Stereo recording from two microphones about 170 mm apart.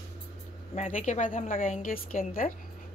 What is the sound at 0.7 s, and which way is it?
A woman's voice, 45° left (ahead or behind).